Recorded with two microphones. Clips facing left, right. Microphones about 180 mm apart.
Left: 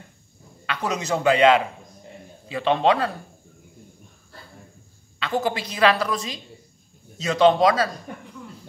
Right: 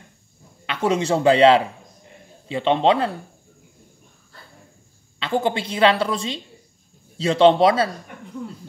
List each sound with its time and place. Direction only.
0.7 s a woman's voice: 25° right (ahead or behind)
5.2 s a woman's voice: 25° right (ahead or behind)